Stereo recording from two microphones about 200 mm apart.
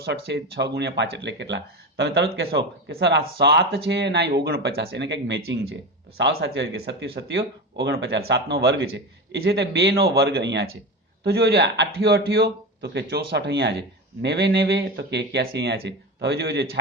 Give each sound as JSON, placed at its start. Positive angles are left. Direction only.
{"t": 0.0, "sound": "speech", "side_deg": -55}